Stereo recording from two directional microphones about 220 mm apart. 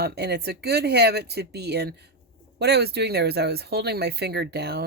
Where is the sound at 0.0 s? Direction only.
45° right (ahead or behind).